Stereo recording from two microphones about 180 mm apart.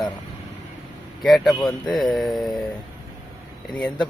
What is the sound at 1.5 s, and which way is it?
Speech, 20° left (ahead or behind).